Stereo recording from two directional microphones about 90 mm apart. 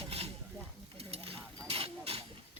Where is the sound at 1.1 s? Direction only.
90° right.